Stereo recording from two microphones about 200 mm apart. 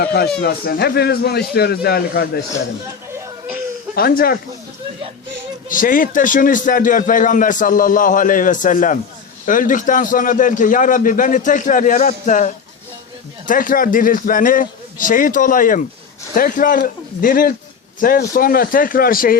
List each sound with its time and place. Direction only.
0.0 s a man's voice: 50° left (ahead or behind)
3.1 s a sound: 15° right (ahead or behind)
3.9 s a man's voice: 45° left (ahead or behind)
5.6 s a man's voice: 45° left (ahead or behind)